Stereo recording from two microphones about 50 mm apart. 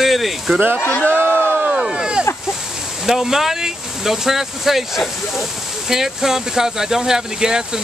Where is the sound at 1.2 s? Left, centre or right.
Left.